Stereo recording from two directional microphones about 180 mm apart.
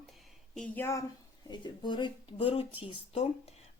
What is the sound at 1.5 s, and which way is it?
Speech, 25° left (ahead or behind).